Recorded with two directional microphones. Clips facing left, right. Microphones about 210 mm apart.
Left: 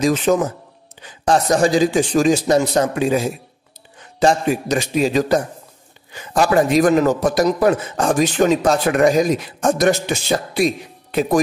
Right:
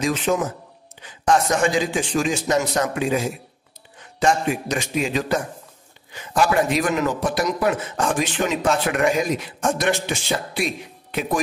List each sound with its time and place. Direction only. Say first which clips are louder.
0.0 s a man's voice: left 5 dB; 40° left (ahead or behind)